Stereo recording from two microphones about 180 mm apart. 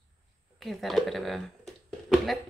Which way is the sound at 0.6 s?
Centre (ahead or behind).